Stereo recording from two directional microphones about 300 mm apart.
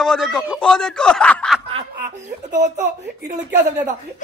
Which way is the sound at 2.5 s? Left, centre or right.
Right.